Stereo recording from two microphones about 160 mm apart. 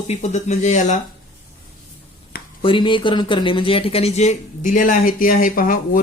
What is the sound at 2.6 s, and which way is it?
Speech, 30° left (ahead or behind).